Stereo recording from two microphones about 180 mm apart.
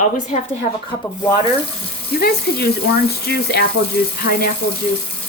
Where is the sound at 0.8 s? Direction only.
20° left (ahead or behind).